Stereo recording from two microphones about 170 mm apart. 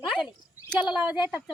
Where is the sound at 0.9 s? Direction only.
10° right (ahead or behind).